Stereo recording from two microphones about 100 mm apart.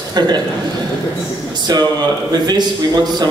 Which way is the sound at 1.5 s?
45° right (ahead or behind).